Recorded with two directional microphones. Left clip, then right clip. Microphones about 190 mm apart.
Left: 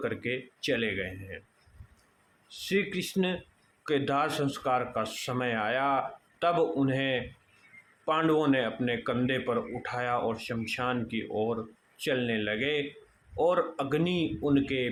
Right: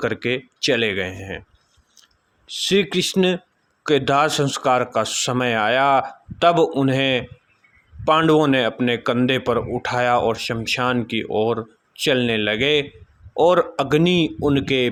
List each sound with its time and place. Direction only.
0.0 s a man's voice: 50° right (ahead or behind)
2.5 s a man's voice: 50° right (ahead or behind)